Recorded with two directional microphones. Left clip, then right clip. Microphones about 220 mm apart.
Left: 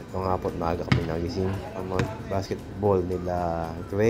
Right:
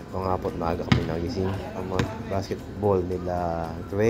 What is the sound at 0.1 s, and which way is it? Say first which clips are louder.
Speech: even; centre (ahead or behind).